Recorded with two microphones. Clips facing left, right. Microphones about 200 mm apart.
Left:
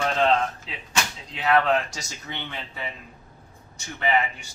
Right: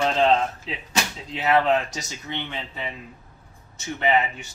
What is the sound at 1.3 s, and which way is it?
Speech, 25° right (ahead or behind).